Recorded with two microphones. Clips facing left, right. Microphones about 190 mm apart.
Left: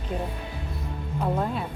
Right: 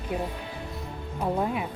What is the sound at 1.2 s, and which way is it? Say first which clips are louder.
Speech: even; 15° right (ahead or behind).